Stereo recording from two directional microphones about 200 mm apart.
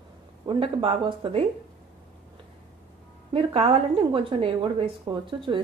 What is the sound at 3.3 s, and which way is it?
A woman's voice, 30° right (ahead or behind).